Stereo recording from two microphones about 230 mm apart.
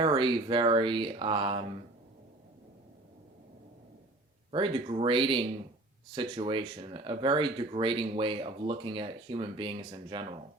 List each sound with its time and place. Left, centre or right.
0.0 s speech: right
4.5 s speech: right